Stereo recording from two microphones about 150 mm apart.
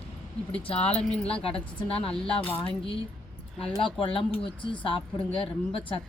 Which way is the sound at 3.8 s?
35° left (ahead or behind).